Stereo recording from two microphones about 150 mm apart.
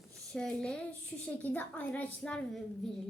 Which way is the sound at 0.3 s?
5° left (ahead or behind).